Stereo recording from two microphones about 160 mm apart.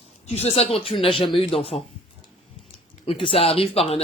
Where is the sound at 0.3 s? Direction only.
40° left (ahead or behind).